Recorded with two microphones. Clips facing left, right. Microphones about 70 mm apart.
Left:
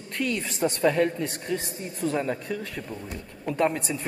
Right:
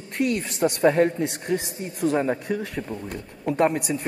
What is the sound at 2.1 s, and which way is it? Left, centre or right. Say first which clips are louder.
A woman's voice: right 5 dB; right.